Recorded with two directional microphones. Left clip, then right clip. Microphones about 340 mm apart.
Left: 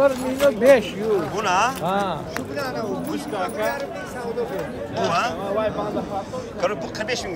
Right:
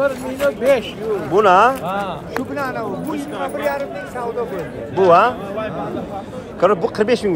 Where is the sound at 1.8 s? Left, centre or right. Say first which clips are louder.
Even; left.